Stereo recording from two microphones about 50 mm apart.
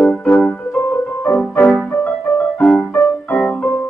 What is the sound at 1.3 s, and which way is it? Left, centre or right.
Music, left.